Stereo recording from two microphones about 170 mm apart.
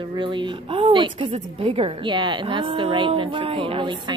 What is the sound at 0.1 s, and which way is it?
A woman's voice, 30° right (ahead or behind).